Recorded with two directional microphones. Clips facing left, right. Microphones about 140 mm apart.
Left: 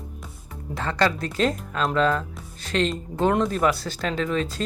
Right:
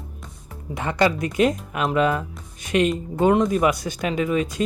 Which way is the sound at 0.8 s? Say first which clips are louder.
Right 3 dB; 15° right (ahead or behind).